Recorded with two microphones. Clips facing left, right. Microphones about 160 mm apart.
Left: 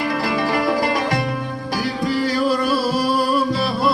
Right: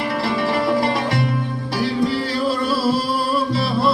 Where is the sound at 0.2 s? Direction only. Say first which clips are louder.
Right 2 dB; 25° right (ahead or behind).